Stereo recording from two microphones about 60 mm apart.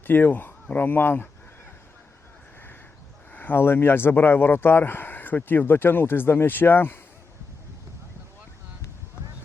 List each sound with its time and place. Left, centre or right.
0.1 s speech: left
3.3 s speech: left